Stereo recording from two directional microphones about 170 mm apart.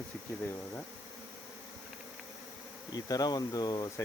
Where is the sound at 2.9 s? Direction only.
20° left (ahead or behind).